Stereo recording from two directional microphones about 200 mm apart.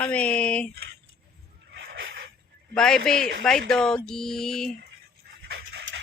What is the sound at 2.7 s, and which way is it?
Mantra, 5° left (ahead or behind).